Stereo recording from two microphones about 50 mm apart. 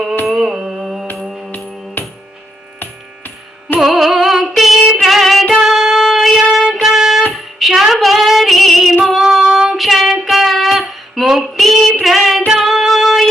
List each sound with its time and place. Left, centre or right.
0.3 s music: centre
1.5 s music: left
2.7 s hum: left
3.8 s music: centre
7.6 s female singing: centre
9.2 s child singing: centre
12.5 s music: centre